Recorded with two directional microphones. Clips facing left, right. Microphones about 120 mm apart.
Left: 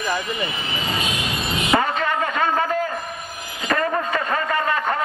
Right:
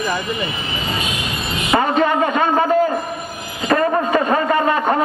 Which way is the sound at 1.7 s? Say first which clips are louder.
Right 5 dB; 20° right (ahead or behind).